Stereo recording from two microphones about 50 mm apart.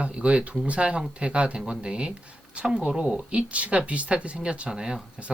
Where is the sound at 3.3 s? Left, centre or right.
Right.